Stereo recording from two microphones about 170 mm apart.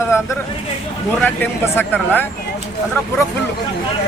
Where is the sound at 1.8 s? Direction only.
10° left (ahead or behind).